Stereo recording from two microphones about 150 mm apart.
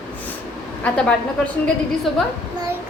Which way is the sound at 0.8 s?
5° left (ahead or behind).